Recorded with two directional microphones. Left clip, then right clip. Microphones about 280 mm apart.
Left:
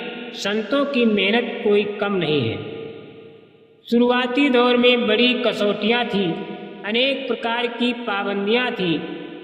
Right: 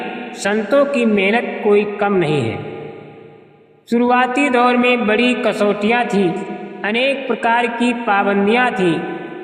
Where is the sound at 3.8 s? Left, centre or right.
Right.